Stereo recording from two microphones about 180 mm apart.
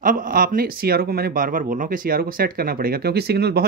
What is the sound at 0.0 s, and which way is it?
Speech, 50° right (ahead or behind).